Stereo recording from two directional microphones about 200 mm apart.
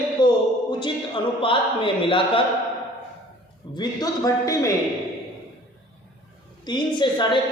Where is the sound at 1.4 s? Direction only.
25° left (ahead or behind).